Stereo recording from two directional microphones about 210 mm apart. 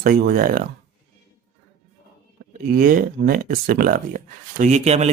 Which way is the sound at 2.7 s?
45° right (ahead or behind).